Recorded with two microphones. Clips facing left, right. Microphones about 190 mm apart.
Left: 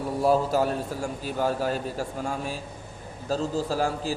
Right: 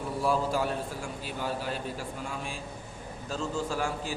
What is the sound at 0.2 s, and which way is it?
A man's voice, 40° left (ahead or behind).